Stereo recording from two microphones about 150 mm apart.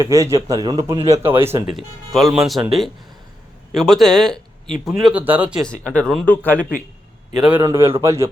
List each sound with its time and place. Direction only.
0.0 s a man's voice: 20° right (ahead or behind)
0.9 s speech: 45° right (ahead or behind)
1.2 s speech: 15° right (ahead or behind)
1.7 s speech: centre (ahead or behind)
3.8 s speech: centre (ahead or behind)
5.6 s speech: 5° left (ahead or behind)
7.6 s speech: 15° right (ahead or behind)